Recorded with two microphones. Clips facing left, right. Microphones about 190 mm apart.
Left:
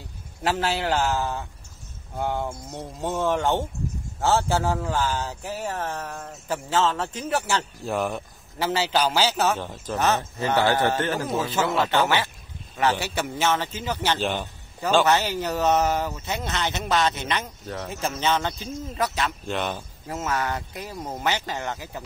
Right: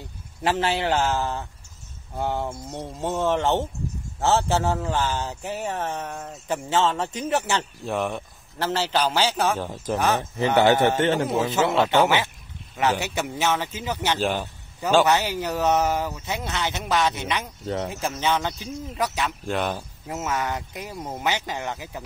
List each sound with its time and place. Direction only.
0.4 s speech: 5° right (ahead or behind)
9.7 s a man's voice: 10° right (ahead or behind)
14.1 s speech: 5° right (ahead or behind)